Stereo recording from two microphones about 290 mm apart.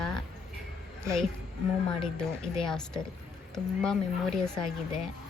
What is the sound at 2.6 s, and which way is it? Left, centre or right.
A woman's voice, centre.